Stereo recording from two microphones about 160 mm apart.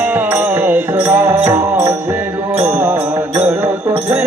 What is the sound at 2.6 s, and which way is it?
Music, 15° right (ahead or behind).